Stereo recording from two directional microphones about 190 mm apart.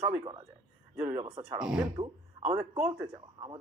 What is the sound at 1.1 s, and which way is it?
Speech, 15° right (ahead or behind).